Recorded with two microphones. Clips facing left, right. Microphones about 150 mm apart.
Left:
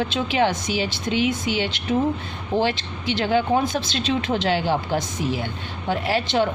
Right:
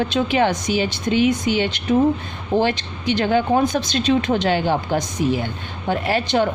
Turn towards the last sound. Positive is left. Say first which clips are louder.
# right 2 dB
turn(degrees=-50)  # may be behind; listen again after turning